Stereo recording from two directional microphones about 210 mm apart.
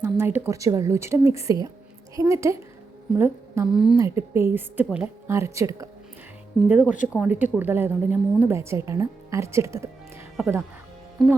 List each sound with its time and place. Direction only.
0.0 s a woman's voice: 10° right (ahead or behind)
11.2 s speech: centre (ahead or behind)